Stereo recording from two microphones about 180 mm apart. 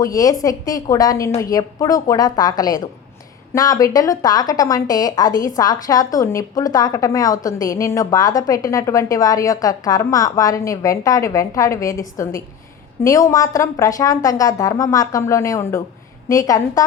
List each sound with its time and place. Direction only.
0.0 s speech: 20° left (ahead or behind)